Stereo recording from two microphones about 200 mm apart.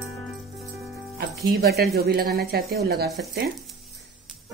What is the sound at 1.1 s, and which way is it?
Speech, 50° right (ahead or behind).